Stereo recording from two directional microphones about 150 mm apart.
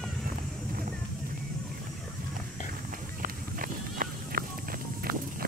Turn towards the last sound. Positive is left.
turn(degrees=-75)  # may be behind; listen again after turning